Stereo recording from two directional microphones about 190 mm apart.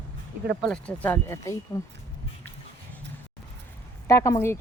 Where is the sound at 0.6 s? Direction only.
5° left (ahead or behind).